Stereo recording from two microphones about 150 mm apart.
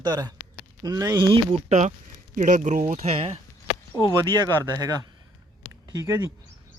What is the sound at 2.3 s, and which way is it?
Speech, 55° right (ahead or behind).